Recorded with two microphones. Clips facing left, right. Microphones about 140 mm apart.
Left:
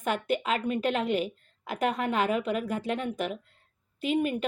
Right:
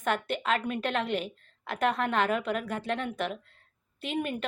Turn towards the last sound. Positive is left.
turn(degrees=5)  # may be behind; listen again after turning